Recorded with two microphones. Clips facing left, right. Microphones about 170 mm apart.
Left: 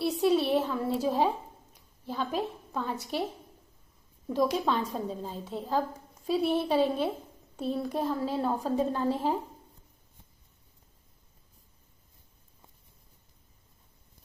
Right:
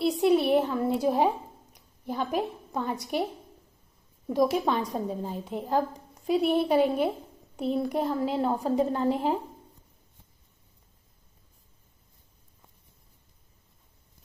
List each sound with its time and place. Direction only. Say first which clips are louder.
0.0 s a woman's voice: right 3 dB; 15° right (ahead or behind)
4.3 s a woman's voice: right 3 dB; 15° right (ahead or behind)